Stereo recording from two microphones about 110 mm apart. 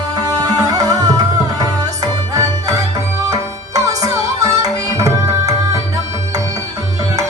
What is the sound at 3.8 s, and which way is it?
Tabla, 30° right (ahead or behind).